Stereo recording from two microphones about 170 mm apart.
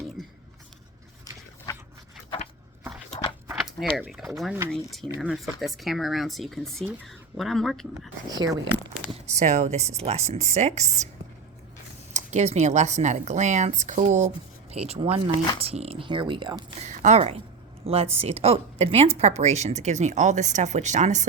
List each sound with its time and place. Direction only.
0.2 s a sound: centre (ahead or behind)
3.6 s a sound: centre (ahead or behind)
3.9 s speech: centre (ahead or behind)
5.0 s speech: 15° right (ahead or behind)
5.3 s speech: centre (ahead or behind)
8.3 s speech: 25° right (ahead or behind)
9.3 s a woman's voice: 45° right (ahead or behind)
12.1 s a woman's voice: 40° right (ahead or behind)
16.8 s a woman's voice: 45° right (ahead or behind)